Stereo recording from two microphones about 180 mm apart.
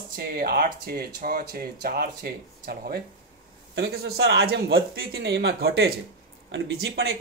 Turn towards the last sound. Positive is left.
turn(degrees=-65)  # may be behind; listen again after turning